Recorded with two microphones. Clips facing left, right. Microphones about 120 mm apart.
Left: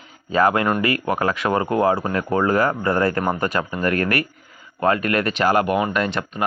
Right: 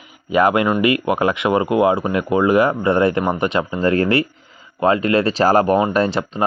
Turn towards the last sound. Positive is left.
turn(degrees=-30)  # may be behind; listen again after turning